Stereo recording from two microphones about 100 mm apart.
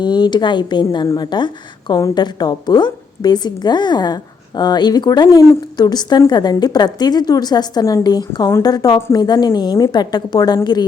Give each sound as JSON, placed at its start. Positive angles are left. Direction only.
{"t": 0.0, "sound": "a woman's voice", "side_deg": 50}